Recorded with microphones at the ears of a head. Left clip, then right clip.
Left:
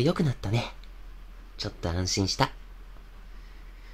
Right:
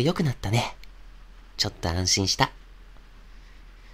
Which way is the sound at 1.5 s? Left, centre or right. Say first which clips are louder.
Right 5 dB; right.